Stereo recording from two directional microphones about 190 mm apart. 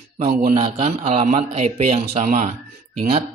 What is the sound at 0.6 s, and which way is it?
Speech, 30° right (ahead or behind).